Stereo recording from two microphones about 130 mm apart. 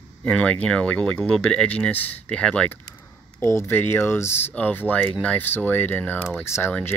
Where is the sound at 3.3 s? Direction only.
20° left (ahead or behind).